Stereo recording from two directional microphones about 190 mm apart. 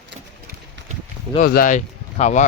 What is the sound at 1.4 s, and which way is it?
Speech, 45° left (ahead or behind).